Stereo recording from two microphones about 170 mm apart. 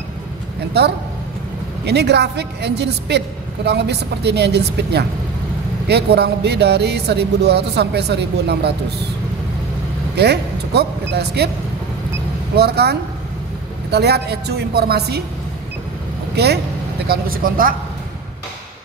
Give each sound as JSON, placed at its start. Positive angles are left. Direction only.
{"t": 0.8, "sound": "a woman's voice", "side_deg": -75}
{"t": 10.1, "sound": "speech", "side_deg": -75}
{"t": 12.5, "sound": "speech", "side_deg": -70}
{"t": 17.1, "sound": "speech", "side_deg": -60}